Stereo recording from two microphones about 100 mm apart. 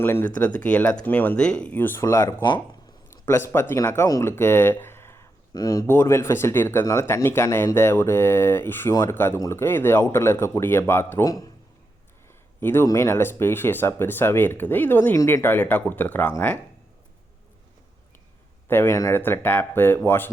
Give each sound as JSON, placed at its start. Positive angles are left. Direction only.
{"t": 0.0, "sound": "speech", "side_deg": 20}
{"t": 5.5, "sound": "speech", "side_deg": 35}
{"t": 5.8, "sound": "speech", "side_deg": 25}
{"t": 8.9, "sound": "speech", "side_deg": 35}
{"t": 9.1, "sound": "speech", "side_deg": 20}
{"t": 12.5, "sound": "a man's voice", "side_deg": 25}
{"t": 18.7, "sound": "speech", "side_deg": 25}